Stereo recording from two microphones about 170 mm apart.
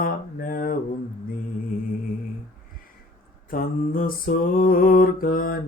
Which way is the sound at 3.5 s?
55° left (ahead or behind).